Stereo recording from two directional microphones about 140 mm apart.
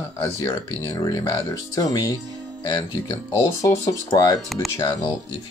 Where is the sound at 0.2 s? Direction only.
20° left (ahead or behind).